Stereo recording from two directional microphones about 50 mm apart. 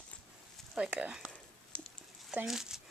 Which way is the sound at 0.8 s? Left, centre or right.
Centre.